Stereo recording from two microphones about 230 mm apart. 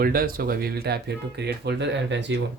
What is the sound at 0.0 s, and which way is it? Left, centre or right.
Speech, right.